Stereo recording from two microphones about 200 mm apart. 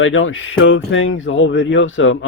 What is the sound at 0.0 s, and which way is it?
Speech, 75° left (ahead or behind).